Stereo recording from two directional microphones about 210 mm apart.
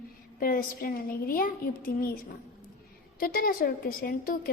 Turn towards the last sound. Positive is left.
turn(degrees=45)  # may be behind; listen again after turning